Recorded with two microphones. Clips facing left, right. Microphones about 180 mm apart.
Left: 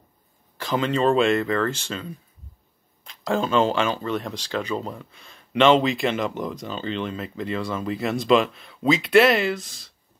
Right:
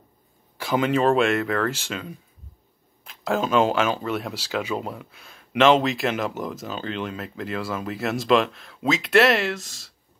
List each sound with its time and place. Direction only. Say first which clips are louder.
0.6 s speech: right 1 dB; 10° right (ahead or behind)